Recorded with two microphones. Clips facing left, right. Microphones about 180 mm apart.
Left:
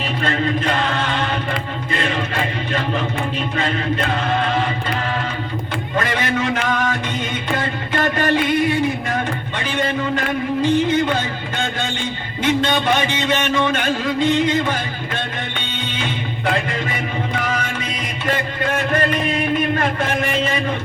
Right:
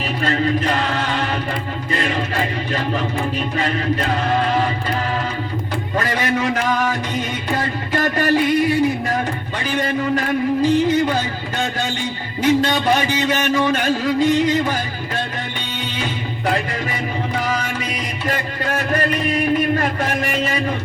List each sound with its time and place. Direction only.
0.3 s chant: 35° right (ahead or behind)
6.0 s a sound: 35° right (ahead or behind)
7.5 s music: 35° right (ahead or behind)
12.4 s music: 35° right (ahead or behind)
16.9 s music: 35° right (ahead or behind)
18.6 s a sound: 35° right (ahead or behind)